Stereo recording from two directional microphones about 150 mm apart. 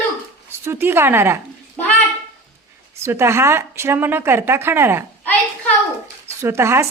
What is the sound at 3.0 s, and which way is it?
Speech, 15° right (ahead or behind).